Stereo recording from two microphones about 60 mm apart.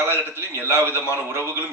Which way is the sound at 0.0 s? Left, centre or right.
Right.